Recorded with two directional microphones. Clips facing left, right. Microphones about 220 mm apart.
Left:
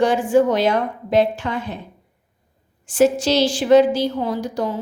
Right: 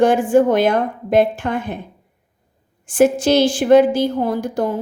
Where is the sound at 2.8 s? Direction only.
55° right (ahead or behind).